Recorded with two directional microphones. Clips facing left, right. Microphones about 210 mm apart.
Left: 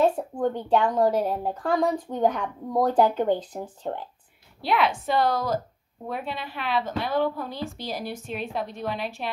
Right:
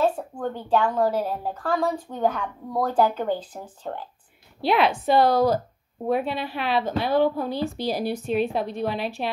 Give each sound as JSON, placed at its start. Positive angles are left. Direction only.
{"t": 0.0, "sound": "a woman's voice", "side_deg": 20}
{"t": 4.6, "sound": "a woman's voice", "side_deg": -30}